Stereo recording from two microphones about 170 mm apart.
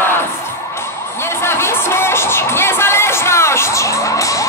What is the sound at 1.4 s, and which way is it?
Music, 15° left (ahead or behind).